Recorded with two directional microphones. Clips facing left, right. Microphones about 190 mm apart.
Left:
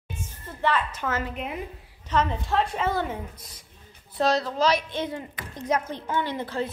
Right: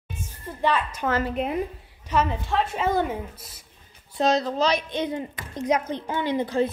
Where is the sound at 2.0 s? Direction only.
5° right (ahead or behind).